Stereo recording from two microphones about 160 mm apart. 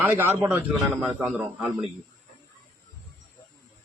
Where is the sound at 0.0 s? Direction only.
15° right (ahead or behind).